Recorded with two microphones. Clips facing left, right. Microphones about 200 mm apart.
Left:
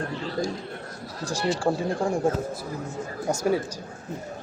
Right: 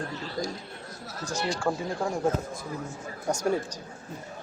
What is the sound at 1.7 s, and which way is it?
Speech, 15° left (ahead or behind).